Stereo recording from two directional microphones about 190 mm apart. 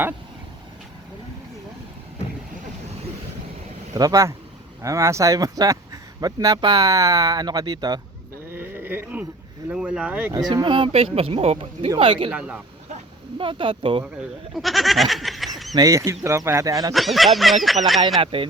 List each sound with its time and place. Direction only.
3.9 s speech: 20° right (ahead or behind)
8.5 s a sound: 10° right (ahead or behind)
9.6 s speech: 5° right (ahead or behind)
10.5 s speech: 25° right (ahead or behind)
12.3 s speech: 5° right (ahead or behind)
13.4 s speech: 25° right (ahead or behind)
14.5 s goat: centre (ahead or behind)
15.7 s speech: 20° right (ahead or behind)
16.9 s goat: centre (ahead or behind)
18.2 s speech: 30° right (ahead or behind)